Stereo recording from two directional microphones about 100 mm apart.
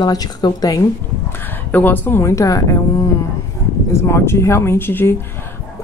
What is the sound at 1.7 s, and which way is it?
Speech, 20° left (ahead or behind).